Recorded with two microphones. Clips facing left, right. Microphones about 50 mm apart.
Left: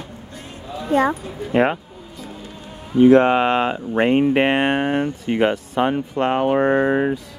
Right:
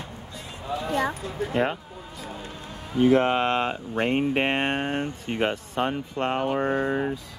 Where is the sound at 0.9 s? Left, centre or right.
Left.